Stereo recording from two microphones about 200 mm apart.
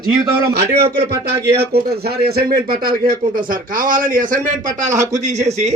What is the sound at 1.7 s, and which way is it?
A man's voice, 50° right (ahead or behind).